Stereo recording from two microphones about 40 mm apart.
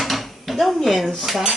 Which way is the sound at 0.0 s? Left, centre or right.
Centre.